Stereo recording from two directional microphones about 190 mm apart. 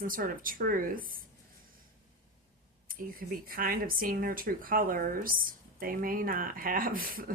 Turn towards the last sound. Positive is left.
turn(degrees=-50)  # may be behind; listen again after turning